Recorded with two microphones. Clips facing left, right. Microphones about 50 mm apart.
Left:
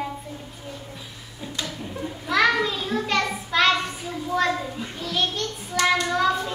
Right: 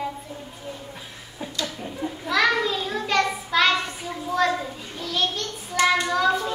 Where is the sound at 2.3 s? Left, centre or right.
Centre.